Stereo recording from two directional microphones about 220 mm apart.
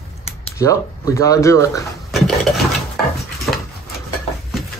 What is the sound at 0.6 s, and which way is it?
Speech, 15° left (ahead or behind).